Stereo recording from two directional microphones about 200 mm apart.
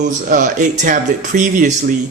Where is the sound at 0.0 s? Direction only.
40° right (ahead or behind).